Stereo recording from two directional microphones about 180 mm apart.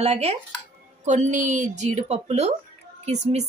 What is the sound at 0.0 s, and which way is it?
A woman's voice, 35° right (ahead or behind).